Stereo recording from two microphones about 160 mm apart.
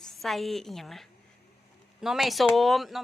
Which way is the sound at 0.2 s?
Centre (ahead or behind).